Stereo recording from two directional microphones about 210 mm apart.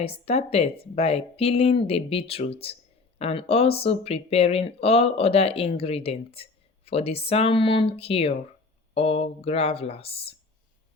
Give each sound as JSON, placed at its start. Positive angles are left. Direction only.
{"t": 0.0, "sound": "speech", "side_deg": 30}